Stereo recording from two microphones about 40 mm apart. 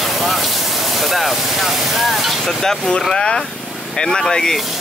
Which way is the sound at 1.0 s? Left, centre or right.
Centre.